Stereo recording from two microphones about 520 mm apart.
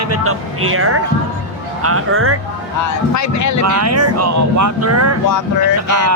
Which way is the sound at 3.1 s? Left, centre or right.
Left.